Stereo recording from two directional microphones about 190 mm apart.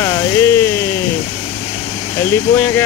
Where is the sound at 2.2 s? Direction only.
10° left (ahead or behind).